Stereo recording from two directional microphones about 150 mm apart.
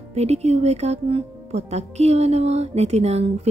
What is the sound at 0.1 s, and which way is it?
Speech, 45° right (ahead or behind).